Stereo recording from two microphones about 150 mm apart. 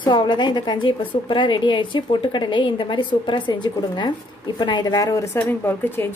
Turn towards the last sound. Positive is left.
turn(degrees=15)  # may be behind; listen again after turning